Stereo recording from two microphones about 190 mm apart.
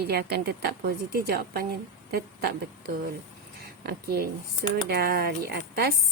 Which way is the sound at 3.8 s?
55° right (ahead or behind).